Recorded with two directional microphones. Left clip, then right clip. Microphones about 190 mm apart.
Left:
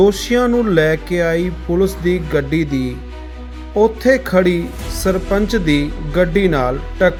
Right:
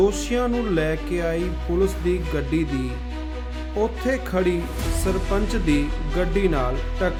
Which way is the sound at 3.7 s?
15° left (ahead or behind).